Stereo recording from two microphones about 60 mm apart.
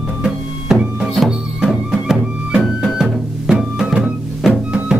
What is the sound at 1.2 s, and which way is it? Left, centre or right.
Music, centre.